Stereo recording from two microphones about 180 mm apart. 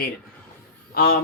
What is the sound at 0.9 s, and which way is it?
Speech, 55° left (ahead or behind).